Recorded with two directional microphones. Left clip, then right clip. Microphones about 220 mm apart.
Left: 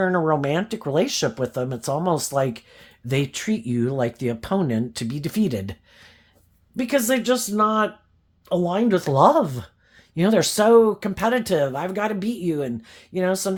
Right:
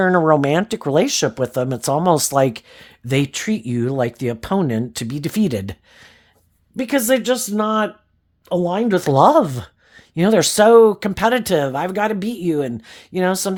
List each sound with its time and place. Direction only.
0.0 s speech: 35° right (ahead or behind)